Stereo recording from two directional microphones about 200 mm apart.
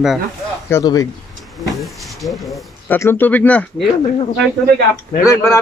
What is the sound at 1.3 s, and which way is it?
Speech, centre (ahead or behind).